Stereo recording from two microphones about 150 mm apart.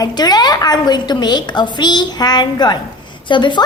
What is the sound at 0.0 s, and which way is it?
A woman's voice, 25° left (ahead or behind).